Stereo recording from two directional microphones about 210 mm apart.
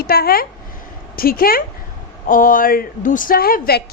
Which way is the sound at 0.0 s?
45° left (ahead or behind).